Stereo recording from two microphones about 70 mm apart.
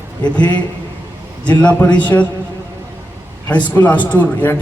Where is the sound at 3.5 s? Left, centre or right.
Left.